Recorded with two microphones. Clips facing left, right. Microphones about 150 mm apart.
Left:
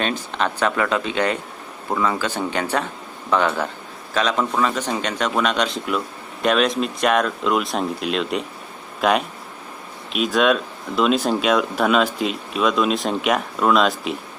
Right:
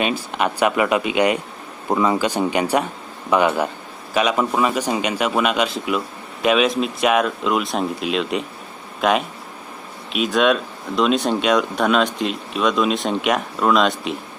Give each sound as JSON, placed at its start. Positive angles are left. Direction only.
{"t": 0.0, "sound": "a man's voice", "side_deg": -10}